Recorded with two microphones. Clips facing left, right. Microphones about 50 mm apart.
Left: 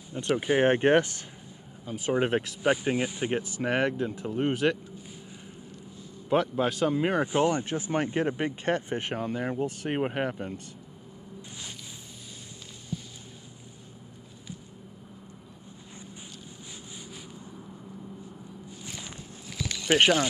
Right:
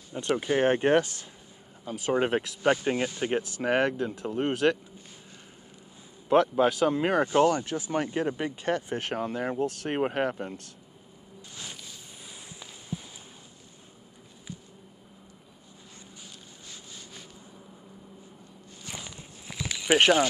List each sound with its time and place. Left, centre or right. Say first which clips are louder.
0.1 s speech: even; centre
0.4 s speech: left 2 dB; centre
1.9 s speech: even; centre
6.2 s speech: right 4 dB; centre
7.2 s speech: right 2 dB; centre
9.0 s speech: right 1 dB; centre
19.6 s a sound: right 1 dB; centre